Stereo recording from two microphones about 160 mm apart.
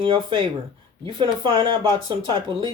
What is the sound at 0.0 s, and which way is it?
Speech, 30° right (ahead or behind).